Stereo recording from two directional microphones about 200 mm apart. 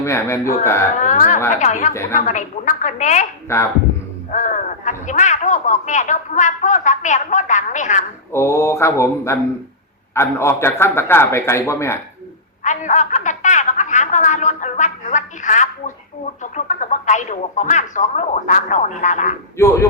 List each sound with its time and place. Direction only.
0.0 s a man's voice: 15° left (ahead or behind)
1.0 s speech: 40° left (ahead or behind)
1.9 s a man's voice: 15° left (ahead or behind)
2.1 s speech: 40° left (ahead or behind)
3.5 s a man's voice: 10° left (ahead or behind)
4.3 s speech: 40° left (ahead or behind)
8.3 s a man's voice: 15° left (ahead or behind)
12.6 s a woman's voice: 40° left (ahead or behind)
19.5 s a man's voice: 15° left (ahead or behind)